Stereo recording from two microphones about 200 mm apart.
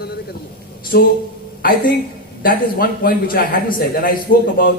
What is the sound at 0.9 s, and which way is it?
Speech, 50° left (ahead or behind).